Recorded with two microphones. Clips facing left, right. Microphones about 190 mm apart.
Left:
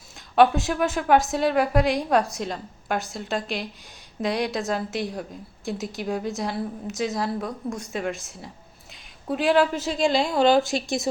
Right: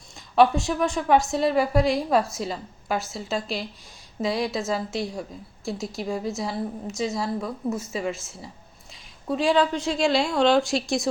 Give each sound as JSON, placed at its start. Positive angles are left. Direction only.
{"t": 0.3, "sound": "a woman's voice", "side_deg": 0}